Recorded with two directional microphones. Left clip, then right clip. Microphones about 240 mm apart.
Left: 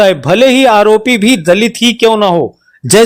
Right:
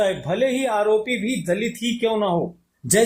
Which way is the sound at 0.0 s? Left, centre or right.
Left.